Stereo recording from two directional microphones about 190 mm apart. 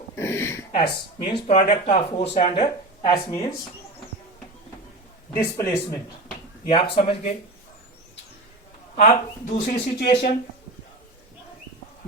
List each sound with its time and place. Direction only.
0.2 s a sound: 15° left (ahead or behind)
0.7 s speech: 25° left (ahead or behind)
3.0 s speech: 20° left (ahead or behind)
5.3 s a man's voice: 15° left (ahead or behind)
6.7 s speech: 30° left (ahead or behind)
9.6 s speech: 55° left (ahead or behind)